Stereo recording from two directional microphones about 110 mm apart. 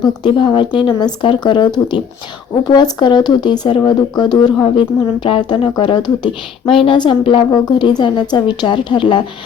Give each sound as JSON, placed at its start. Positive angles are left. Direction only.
{"t": 0.0, "sound": "speech", "side_deg": 45}